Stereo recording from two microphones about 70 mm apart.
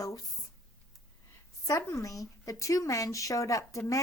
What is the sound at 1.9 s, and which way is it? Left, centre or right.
Speech, left.